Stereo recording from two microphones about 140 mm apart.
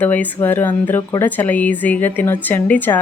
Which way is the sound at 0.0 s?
10° left (ahead or behind).